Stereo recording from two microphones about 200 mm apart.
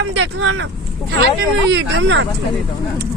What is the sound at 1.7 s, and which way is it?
Speech, 65° right (ahead or behind).